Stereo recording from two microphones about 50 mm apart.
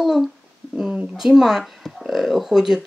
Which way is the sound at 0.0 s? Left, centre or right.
Centre.